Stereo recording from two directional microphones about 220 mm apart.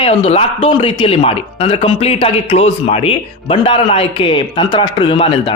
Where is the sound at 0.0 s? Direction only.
25° left (ahead or behind).